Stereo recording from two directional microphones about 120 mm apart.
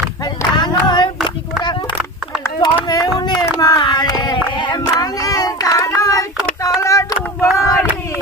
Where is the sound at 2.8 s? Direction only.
35° left (ahead or behind).